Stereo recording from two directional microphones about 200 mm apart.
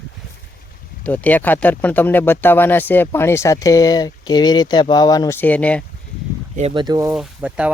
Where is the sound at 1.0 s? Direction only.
10° left (ahead or behind).